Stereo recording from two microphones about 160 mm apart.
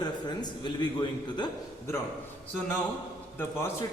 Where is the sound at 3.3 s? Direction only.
15° left (ahead or behind).